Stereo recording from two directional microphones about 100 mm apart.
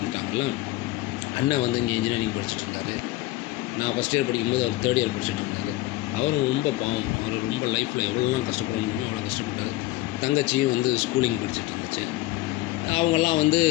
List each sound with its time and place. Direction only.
1.5 s speech: 80° left
3.8 s speech: 85° left
10.2 s speech: 90° left
12.9 s speech: 75° left (ahead or behind)